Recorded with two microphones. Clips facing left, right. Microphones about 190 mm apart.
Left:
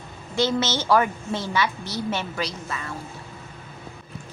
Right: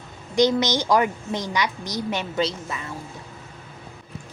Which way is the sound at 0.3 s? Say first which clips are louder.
Right 4 dB; 15° right (ahead or behind).